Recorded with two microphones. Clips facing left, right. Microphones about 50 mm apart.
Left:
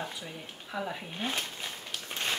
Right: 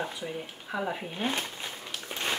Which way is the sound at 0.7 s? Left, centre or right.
Right.